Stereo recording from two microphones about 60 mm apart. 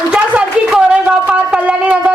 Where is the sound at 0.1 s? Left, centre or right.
Centre.